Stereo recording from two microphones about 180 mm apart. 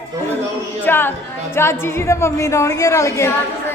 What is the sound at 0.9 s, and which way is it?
Speech, 10° left (ahead or behind).